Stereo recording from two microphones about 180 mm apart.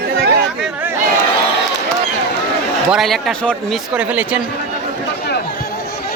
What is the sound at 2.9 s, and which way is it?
Speech, centre (ahead or behind).